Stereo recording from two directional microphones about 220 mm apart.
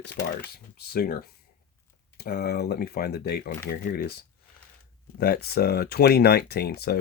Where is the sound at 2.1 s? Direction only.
45° left (ahead or behind).